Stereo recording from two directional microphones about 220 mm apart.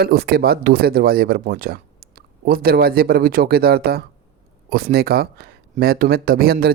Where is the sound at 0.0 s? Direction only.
45° right (ahead or behind).